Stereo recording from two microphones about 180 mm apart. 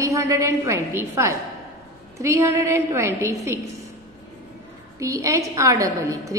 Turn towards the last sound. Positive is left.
turn(degrees=-20)  # may be behind; listen again after turning